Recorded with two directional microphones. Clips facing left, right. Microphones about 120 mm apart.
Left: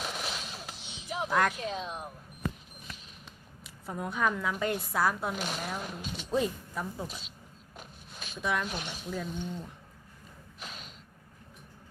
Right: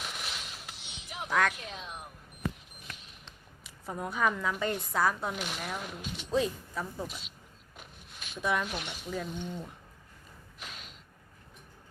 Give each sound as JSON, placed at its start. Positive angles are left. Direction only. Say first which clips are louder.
{"t": 0.0, "sound": "music", "louder": "left 4 dB", "side_deg": 35}
{"t": 1.3, "sound": "speech", "louder": "left 1 dB", "side_deg": 10}
{"t": 1.5, "sound": "speech", "louder": "left 7 dB", "side_deg": 35}
{"t": 2.8, "sound": "a sound", "louder": "even", "side_deg": 5}
{"t": 5.8, "sound": "speech", "louder": "left 1 dB", "side_deg": 35}
{"t": 6.3, "sound": "speech", "louder": "even", "side_deg": 5}
{"t": 7.8, "sound": "a sound", "louder": "left 3 dB", "side_deg": 35}
{"t": 8.4, "sound": "speech", "louder": "right 1 dB", "side_deg": 0}
{"t": 8.6, "sound": "speech", "louder": "even", "side_deg": 35}
{"t": 9.0, "sound": "speech", "louder": "even", "side_deg": 0}
{"t": 10.6, "sound": "a sound", "louder": "left 2 dB", "side_deg": 35}